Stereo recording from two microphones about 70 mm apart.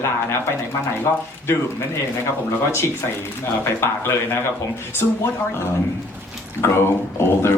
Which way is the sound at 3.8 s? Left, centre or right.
Left.